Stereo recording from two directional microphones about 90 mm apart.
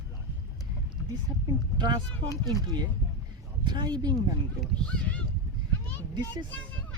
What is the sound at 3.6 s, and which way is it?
Speech, 55° right (ahead or behind).